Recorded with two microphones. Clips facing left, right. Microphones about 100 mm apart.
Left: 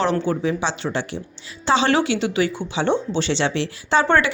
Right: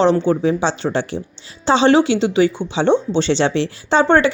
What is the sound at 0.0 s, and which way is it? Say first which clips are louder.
Speech: right 6 dB; 25° right (ahead or behind).